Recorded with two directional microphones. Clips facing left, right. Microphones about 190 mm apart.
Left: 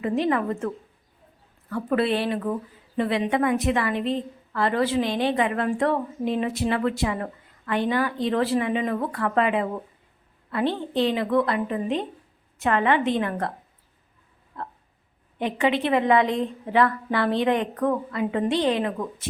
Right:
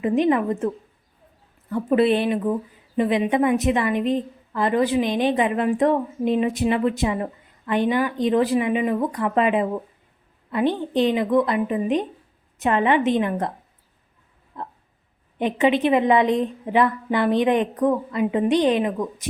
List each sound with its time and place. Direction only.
0.0 s a woman's voice: 20° right (ahead or behind)
1.7 s a woman's voice: 20° right (ahead or behind)
14.5 s a sound: 20° right (ahead or behind)
15.4 s a woman's voice: 20° right (ahead or behind)